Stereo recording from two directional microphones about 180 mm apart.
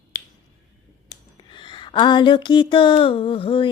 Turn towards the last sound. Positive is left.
turn(degrees=30)  # may be behind; listen again after turning